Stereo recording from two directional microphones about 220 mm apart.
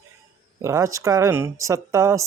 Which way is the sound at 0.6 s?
15° right (ahead or behind).